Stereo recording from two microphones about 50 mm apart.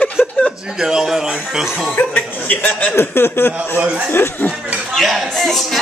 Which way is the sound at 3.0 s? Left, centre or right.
Left.